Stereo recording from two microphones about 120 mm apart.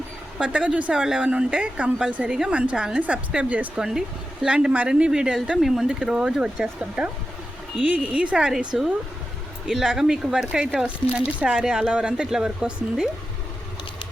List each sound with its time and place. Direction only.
0.3 s a woman's voice: 10° right (ahead or behind)